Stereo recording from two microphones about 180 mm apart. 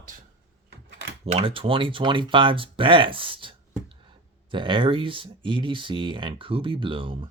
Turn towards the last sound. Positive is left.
turn(degrees=-30)  # may be behind; listen again after turning